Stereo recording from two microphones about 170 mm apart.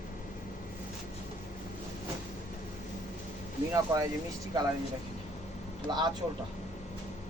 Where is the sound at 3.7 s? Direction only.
20° right (ahead or behind).